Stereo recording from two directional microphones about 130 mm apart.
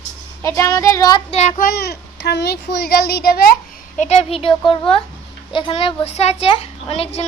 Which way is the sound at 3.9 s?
60° left (ahead or behind).